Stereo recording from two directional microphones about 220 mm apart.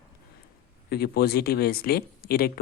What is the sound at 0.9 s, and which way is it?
Speech, 45° left (ahead or behind).